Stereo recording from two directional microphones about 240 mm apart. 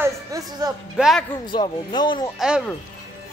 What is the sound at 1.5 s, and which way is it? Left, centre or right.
Speech, centre.